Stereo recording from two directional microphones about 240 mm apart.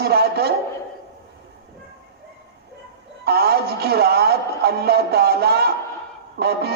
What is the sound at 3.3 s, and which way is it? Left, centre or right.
A man's voice, right.